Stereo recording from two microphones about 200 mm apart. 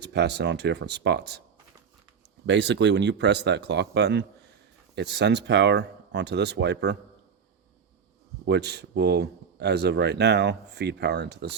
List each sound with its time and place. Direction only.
0.0 s speech: 55° right (ahead or behind)
2.5 s speech: 60° right (ahead or behind)
8.4 s speech: 55° right (ahead or behind)